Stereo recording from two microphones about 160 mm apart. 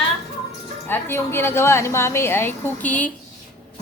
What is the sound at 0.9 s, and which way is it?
A woman's voice, 15° left (ahead or behind).